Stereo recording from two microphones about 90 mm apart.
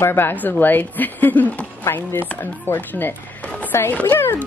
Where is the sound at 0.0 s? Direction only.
25° left (ahead or behind).